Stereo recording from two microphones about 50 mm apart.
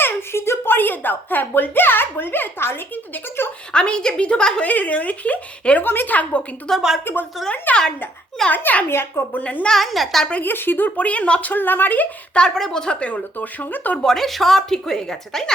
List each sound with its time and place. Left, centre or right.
0.0 s speech: left
3.7 s a woman's voice: centre
4.6 s speech: left
5.8 s a woman's voice: left
6.7 s a woman's voice: centre
7.0 s a woman's voice: left
7.5 s speech: left
8.9 s speech: left
9.4 s a woman's voice: left
9.7 s a woman's voice: centre
10.4 s speech: left
12.5 s a woman's voice: centre
13.3 s speech: left
14.0 s a woman's voice: centre